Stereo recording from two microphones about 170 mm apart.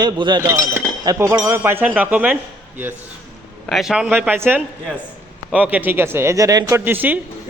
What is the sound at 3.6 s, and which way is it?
A man's voice, centre (ahead or behind).